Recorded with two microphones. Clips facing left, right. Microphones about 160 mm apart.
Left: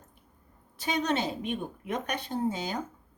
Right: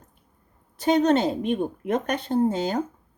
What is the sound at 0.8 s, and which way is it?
Speech, 50° right (ahead or behind).